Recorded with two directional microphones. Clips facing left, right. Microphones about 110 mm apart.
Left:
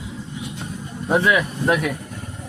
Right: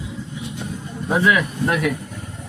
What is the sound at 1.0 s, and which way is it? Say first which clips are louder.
Speech: even; 10° left (ahead or behind).